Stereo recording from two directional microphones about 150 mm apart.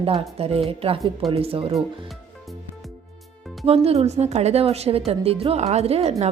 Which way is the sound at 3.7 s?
45° right (ahead or behind).